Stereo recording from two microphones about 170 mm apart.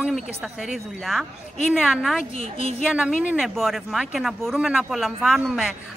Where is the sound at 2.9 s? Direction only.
5° right (ahead or behind).